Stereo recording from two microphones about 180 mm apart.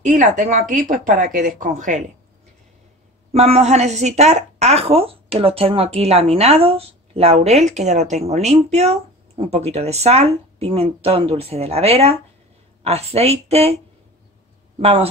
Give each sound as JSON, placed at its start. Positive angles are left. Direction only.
{"t": 0.0, "sound": "a woman's voice", "side_deg": -45}
{"t": 3.3, "sound": "a woman's voice", "side_deg": -35}
{"t": 14.8, "sound": "a woman's voice", "side_deg": -35}